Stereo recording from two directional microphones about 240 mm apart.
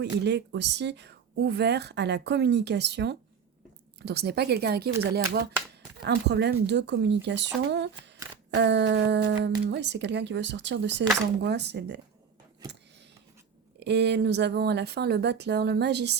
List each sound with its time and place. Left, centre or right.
0.3 s speech: right
13.7 s speech: right